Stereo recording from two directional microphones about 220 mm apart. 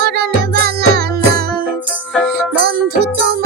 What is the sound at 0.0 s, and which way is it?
Music, 45° right (ahead or behind).